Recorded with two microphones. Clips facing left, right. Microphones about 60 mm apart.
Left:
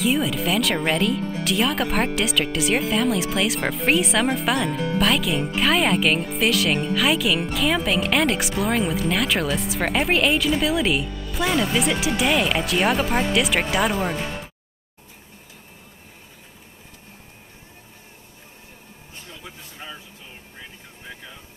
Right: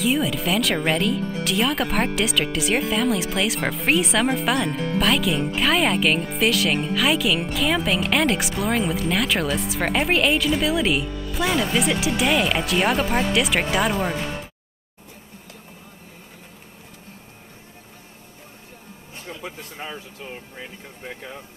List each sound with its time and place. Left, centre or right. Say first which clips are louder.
0.0 s speech: even; centre
19.2 s vehicle: right 8 dB; right
21.1 s a sound: right 4 dB; right